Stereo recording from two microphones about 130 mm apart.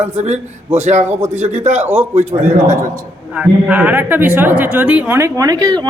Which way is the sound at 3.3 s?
10° right (ahead or behind).